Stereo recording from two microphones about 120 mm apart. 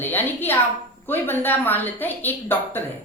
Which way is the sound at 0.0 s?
15° left (ahead or behind).